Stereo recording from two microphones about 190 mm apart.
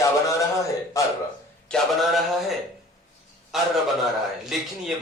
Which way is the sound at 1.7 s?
Centre (ahead or behind).